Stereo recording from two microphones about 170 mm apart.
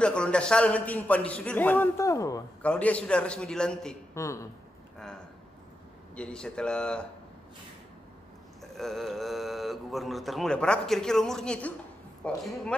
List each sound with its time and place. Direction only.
0.0 s a man's voice: 5° left (ahead or behind)
2.6 s speech: 10° left (ahead or behind)
4.1 s a man's voice: 20° left (ahead or behind)
4.9 s a sound: 5° left (ahead or behind)
6.1 s speech: 5° left (ahead or behind)
8.7 s a man's voice: centre (ahead or behind)